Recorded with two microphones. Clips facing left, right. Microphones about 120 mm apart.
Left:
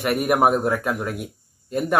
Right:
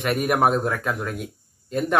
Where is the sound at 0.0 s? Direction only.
Centre (ahead or behind).